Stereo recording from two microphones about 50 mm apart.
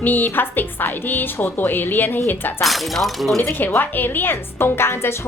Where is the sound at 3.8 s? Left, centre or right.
Left.